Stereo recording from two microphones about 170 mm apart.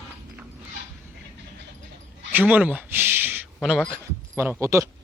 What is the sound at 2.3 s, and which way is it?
Speech, 10° right (ahead or behind).